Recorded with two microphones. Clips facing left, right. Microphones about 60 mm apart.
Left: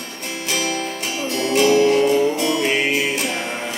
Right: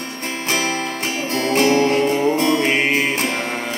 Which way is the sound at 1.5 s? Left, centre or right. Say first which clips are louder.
Left 1 dB; right.